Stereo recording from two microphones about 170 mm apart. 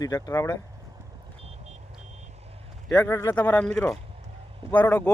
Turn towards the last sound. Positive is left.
turn(degrees=10)  # may be behind; listen again after turning